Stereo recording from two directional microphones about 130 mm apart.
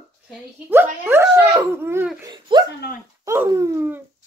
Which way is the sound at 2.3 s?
35° right (ahead or behind).